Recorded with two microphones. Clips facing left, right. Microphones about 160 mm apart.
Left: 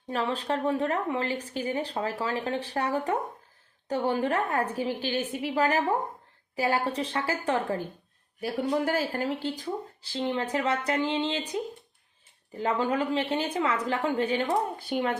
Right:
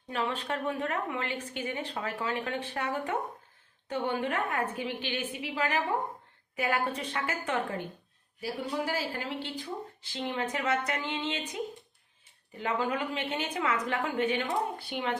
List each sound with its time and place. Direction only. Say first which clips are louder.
0.1 s speech: left 4 dB; 35° left (ahead or behind)
8.4 s speech: left 6 dB; 50° left (ahead or behind); by 11.4 s 30° left (ahead or behind)
12.5 s speech: left 4 dB; 35° left (ahead or behind)
14.8 s speech: left 5 dB; 45° left (ahead or behind)